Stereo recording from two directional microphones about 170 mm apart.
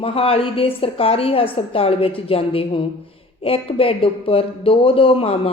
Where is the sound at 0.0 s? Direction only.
35° left (ahead or behind).